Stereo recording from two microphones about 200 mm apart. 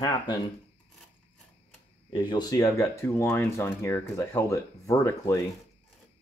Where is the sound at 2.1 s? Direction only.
25° left (ahead or behind).